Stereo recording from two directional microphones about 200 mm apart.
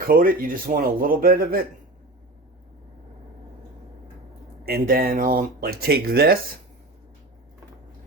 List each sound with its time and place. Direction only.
0.1 s speech: 45° right (ahead or behind)
4.6 s speech: 50° right (ahead or behind)